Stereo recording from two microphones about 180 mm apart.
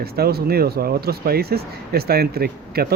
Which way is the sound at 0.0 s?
60° right (ahead or behind).